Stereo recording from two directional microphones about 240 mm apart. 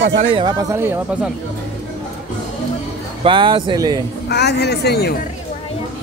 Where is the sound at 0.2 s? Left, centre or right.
Right.